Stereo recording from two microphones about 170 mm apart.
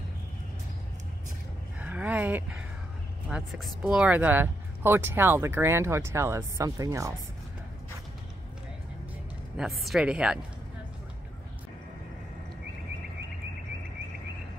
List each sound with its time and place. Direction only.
1.8 s a sound: 10° right (ahead or behind)
3.3 s speech: centre (ahead or behind); by 7.2 s 20° right (ahead or behind)
9.6 s a woman's voice: centre (ahead or behind)